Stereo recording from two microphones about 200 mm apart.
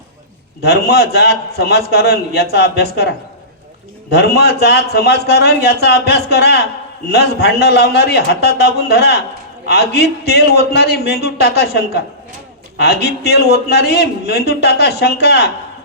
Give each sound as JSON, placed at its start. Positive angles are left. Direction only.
{"t": 0.6, "sound": "a man's voice", "side_deg": 55}